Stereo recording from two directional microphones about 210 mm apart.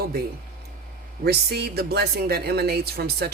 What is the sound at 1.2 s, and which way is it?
Speech, 50° right (ahead or behind).